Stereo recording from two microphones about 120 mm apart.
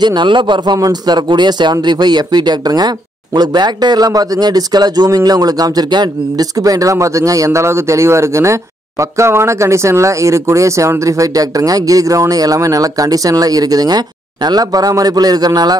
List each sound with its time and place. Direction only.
0.0 s a man's voice: 40° right (ahead or behind)